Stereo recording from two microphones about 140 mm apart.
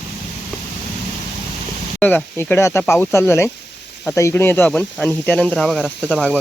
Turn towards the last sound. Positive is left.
turn(degrees=5)  # may be behind; listen again after turning